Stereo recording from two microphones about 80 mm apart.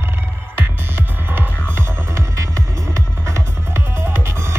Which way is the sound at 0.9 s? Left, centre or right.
Right.